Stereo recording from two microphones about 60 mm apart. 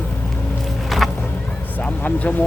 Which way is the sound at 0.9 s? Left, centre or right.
Centre.